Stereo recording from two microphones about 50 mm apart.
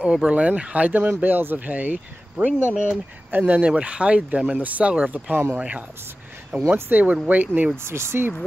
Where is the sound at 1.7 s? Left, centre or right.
Right.